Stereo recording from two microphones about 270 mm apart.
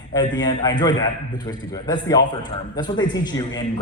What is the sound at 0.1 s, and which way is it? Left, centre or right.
Speech, centre.